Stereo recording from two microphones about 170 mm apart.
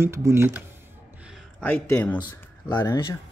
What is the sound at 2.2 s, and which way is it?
Speech, 25° left (ahead or behind).